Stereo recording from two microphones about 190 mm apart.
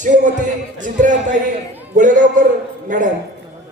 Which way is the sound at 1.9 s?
40° right (ahead or behind).